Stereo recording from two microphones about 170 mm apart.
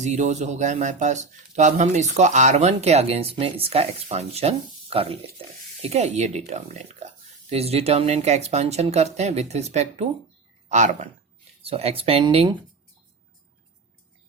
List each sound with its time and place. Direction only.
0.0 s speech: 45° right (ahead or behind)